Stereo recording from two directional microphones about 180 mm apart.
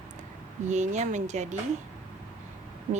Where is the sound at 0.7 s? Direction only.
40° right (ahead or behind).